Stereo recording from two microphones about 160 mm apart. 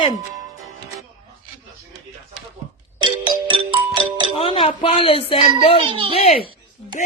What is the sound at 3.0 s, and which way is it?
Music, 30° right (ahead or behind).